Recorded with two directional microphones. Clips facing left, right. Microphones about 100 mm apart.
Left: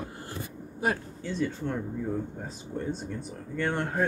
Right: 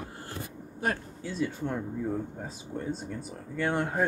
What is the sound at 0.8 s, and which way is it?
Speech, 10° left (ahead or behind).